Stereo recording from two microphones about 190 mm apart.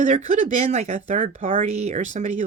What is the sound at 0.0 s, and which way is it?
Speech, 40° right (ahead or behind).